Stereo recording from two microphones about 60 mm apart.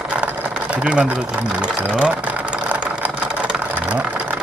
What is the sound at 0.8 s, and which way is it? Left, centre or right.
Speech, centre.